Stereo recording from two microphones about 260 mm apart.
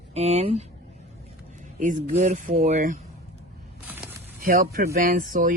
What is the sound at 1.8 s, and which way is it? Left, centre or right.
Speech, right.